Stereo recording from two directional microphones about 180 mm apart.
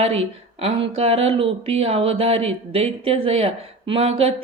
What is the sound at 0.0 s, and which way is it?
Speech, 35° right (ahead or behind).